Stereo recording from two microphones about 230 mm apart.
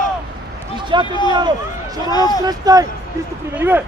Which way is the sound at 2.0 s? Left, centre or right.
Centre.